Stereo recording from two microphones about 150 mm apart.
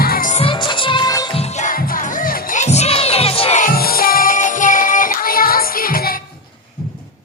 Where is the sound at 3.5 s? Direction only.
75° left (ahead or behind).